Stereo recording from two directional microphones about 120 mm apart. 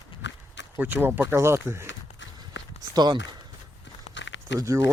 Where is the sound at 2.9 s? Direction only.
35° right (ahead or behind).